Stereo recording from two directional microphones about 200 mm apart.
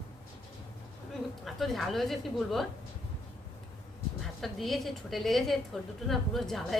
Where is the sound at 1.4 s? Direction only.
Centre (ahead or behind).